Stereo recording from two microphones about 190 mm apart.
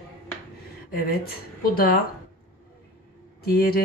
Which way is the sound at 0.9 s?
50° left (ahead or behind).